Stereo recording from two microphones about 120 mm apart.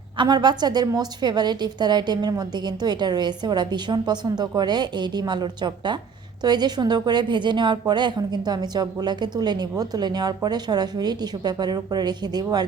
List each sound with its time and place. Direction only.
0.2 s a woman's voice: 35° right (ahead or behind)